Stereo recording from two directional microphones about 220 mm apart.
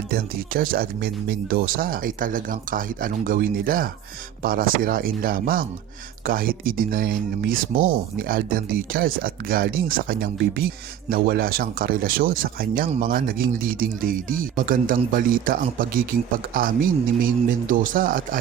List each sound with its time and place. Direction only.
0.1 s speech: 40° right (ahead or behind)